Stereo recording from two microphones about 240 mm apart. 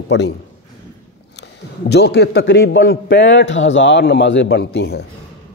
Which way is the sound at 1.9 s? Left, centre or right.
Left.